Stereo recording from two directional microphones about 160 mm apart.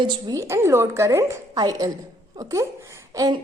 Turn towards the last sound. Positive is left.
turn(degrees=-20)  # may be behind; listen again after turning